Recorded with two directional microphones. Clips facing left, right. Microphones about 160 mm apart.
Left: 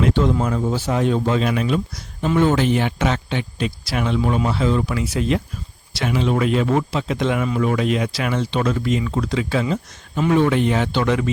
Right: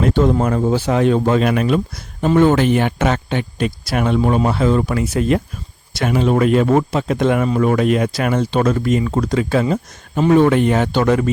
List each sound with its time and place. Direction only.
0.0 s speech: 45° right (ahead or behind)